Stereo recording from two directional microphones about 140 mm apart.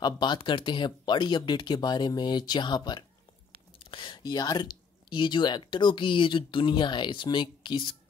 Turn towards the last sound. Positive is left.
turn(degrees=35)  # may be behind; listen again after turning